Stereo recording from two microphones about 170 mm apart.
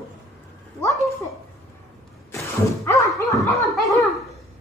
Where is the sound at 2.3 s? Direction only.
20° left (ahead or behind).